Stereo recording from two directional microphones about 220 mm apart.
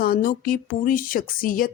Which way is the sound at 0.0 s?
40° left (ahead or behind).